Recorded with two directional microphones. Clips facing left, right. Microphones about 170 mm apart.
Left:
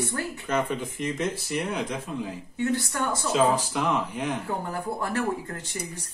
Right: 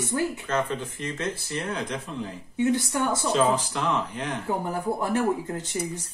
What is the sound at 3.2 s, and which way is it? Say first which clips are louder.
Speech: left 2 dB; 10° left (ahead or behind).